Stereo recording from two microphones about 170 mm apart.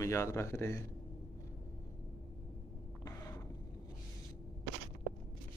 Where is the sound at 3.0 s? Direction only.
20° left (ahead or behind).